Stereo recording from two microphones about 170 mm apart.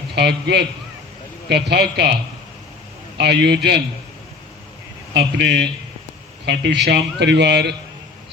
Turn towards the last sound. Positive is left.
turn(degrees=-80)